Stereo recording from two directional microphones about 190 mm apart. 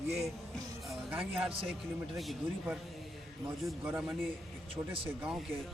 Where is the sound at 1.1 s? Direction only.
10° right (ahead or behind).